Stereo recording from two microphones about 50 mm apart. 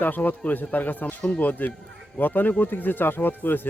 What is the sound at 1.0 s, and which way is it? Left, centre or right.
Speech, left.